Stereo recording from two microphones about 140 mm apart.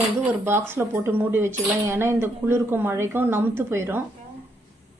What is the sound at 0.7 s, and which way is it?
Speech, 15° right (ahead or behind).